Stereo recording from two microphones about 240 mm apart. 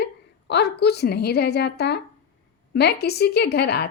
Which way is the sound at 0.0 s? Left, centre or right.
Left.